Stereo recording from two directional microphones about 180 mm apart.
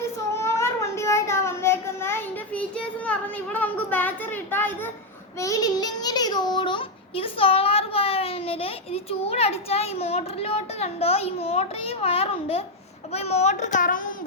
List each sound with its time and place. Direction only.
0.3 s child singing: 15° left (ahead or behind)
3.1 s a sound: 10° left (ahead or behind)
5.4 s a child's voice: 20° left (ahead or behind); by 14.0 s 45° left (ahead or behind)